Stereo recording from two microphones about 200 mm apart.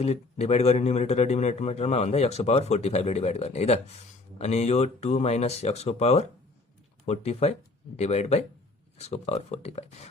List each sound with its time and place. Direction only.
0.0 s a man's voice: 30° left (ahead or behind)